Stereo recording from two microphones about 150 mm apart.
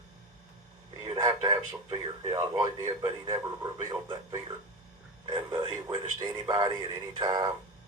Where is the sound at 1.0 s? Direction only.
35° right (ahead or behind).